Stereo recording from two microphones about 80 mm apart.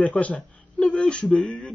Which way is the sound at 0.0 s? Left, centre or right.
Centre.